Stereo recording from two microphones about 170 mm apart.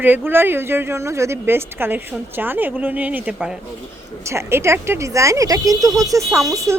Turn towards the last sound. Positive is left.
turn(degrees=-20)  # may be behind; listen again after turning